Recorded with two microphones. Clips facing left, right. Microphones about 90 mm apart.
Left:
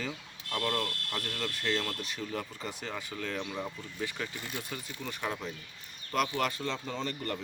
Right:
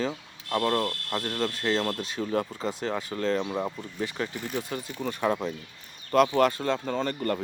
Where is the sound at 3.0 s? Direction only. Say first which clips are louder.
Right 7 dB; 90° right.